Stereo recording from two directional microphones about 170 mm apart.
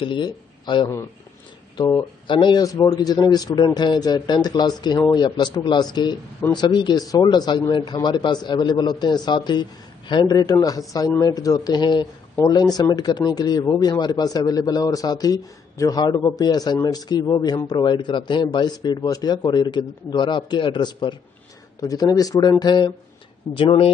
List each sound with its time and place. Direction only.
0.0 s a man's voice: 25° left (ahead or behind)